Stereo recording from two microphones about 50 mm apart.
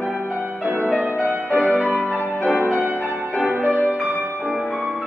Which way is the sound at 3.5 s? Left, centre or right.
Right.